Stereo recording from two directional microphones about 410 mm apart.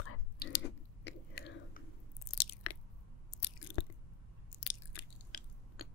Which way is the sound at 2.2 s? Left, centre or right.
Left.